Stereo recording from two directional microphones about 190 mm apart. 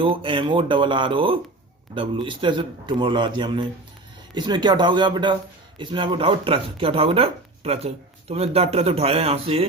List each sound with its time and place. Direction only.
0.0 s a man's voice: 25° right (ahead or behind)